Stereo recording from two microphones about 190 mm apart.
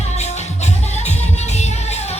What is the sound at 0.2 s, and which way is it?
Music, 35° left (ahead or behind).